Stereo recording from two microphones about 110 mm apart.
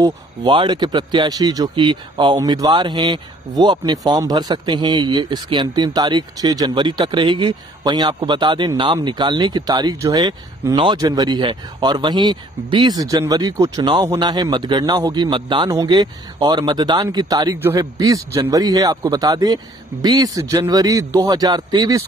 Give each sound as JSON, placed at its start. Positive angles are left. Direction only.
{"t": 0.0, "sound": "speech", "side_deg": -40}
{"t": 12.9, "sound": "speech", "side_deg": -30}